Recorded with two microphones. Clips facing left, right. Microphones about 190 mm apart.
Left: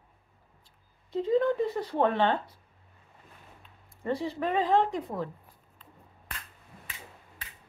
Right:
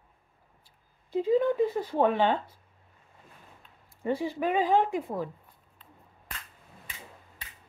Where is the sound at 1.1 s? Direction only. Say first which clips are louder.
Right 1 dB; 10° right (ahead or behind).